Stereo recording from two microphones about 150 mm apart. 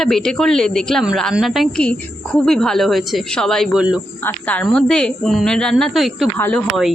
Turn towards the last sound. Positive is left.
turn(degrees=5)  # may be behind; listen again after turning